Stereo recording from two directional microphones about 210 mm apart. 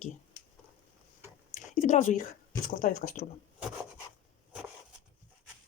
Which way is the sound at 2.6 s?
35° left (ahead or behind).